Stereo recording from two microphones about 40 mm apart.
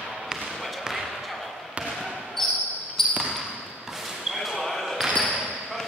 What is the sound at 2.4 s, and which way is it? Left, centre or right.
Basketball bounce, centre.